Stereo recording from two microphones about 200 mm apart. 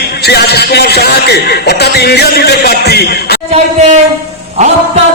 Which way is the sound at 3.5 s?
35° right (ahead or behind).